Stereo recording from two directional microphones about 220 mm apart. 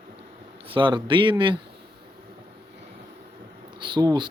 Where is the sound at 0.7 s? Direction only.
20° right (ahead or behind).